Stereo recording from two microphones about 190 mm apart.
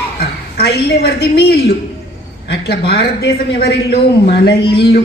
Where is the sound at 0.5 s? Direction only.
60° left (ahead or behind).